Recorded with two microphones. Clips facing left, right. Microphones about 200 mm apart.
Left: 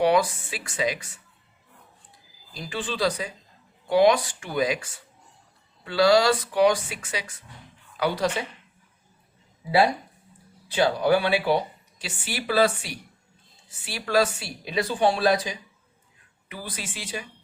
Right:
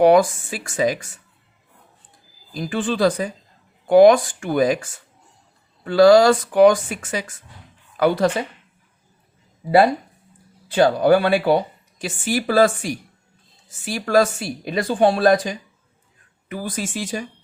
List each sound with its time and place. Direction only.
0.0 s speech: 45° right (ahead or behind)
2.5 s speech: 50° right (ahead or behind)
10.7 s speech: 50° right (ahead or behind)